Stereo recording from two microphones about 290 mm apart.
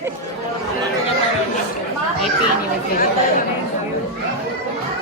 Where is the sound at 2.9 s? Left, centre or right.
Left.